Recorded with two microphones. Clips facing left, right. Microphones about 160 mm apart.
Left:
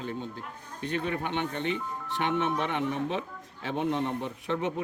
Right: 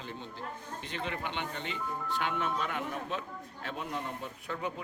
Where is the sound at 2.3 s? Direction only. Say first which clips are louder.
Left 9 dB; 85° left.